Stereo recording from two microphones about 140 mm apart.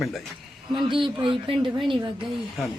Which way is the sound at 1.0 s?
35° right (ahead or behind).